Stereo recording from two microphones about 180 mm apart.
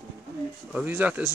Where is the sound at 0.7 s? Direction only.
10° right (ahead or behind).